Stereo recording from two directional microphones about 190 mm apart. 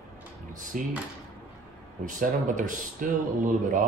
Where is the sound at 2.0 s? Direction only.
40° right (ahead or behind).